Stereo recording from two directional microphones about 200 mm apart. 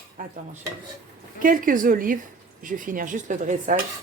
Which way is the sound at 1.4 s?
45° right (ahead or behind).